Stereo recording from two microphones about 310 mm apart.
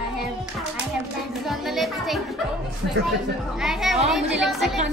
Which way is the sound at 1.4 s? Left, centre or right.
Centre.